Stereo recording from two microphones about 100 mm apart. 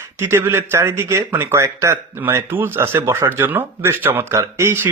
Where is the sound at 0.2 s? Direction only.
25° right (ahead or behind).